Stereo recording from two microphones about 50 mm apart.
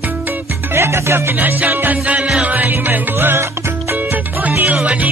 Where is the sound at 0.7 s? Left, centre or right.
Right.